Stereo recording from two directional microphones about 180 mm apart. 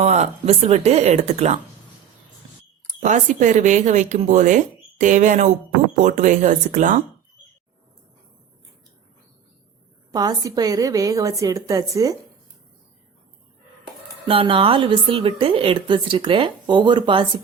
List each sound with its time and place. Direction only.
0.0 s speech: 40° right (ahead or behind)
3.0 s speech: 45° right (ahead or behind)
10.1 s a woman's voice: 20° right (ahead or behind)
14.3 s a woman's voice: 30° right (ahead or behind)